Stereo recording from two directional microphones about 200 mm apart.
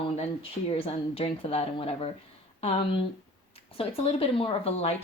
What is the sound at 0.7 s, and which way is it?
Speech, 30° left (ahead or behind).